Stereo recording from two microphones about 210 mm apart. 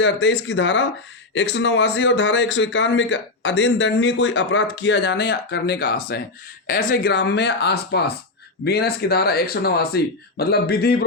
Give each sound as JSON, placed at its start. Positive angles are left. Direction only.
{"t": 0.0, "sound": "speech", "side_deg": 55}